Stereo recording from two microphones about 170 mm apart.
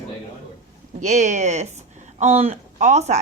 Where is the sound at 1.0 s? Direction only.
45° right (ahead or behind).